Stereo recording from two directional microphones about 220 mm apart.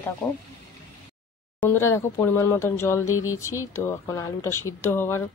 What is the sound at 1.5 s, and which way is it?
Speech, 10° left (ahead or behind).